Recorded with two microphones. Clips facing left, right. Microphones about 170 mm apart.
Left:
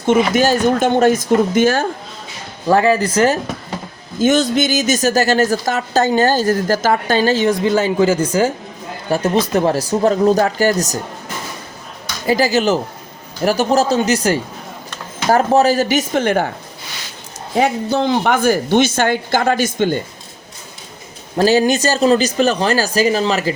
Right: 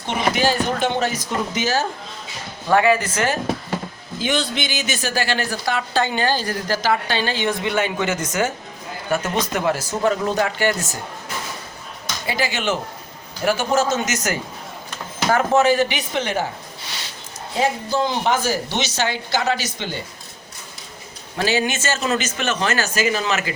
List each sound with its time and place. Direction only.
0.0 s a woman's voice: 45° left (ahead or behind)
2.6 s a woman's voice: 35° left (ahead or behind)
12.2 s a woman's voice: 40° left (ahead or behind)
17.6 s a woman's voice: 65° left (ahead or behind); by 20.0 s 50° left (ahead or behind)
21.3 s a woman's voice: 40° left (ahead or behind)